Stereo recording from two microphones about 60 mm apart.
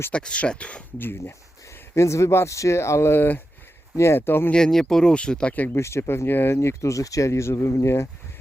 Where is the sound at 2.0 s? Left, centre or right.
Left.